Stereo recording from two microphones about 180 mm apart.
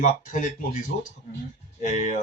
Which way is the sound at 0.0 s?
45° left (ahead or behind).